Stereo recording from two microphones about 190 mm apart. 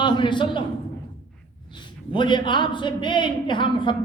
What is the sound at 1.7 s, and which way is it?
A man's voice, 25° left (ahead or behind).